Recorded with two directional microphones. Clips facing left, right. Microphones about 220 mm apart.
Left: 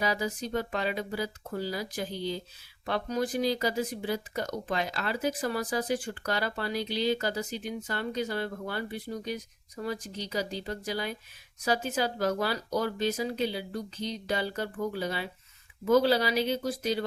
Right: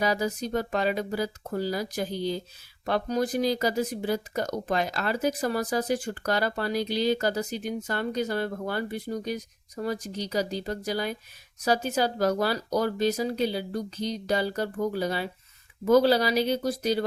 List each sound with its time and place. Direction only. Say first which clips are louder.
0.0 s speech: right 4 dB; 40° right (ahead or behind)